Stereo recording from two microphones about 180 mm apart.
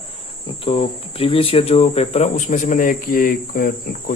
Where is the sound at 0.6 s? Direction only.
30° left (ahead or behind); by 4.1 s 50° left (ahead or behind).